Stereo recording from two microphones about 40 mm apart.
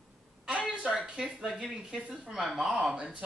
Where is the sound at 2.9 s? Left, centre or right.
Right.